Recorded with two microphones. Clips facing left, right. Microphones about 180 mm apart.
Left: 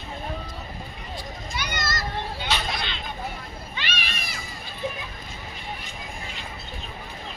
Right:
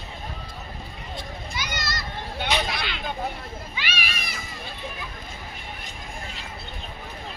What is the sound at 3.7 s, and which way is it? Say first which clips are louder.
Children playing: even; 10° right (ahead or behind).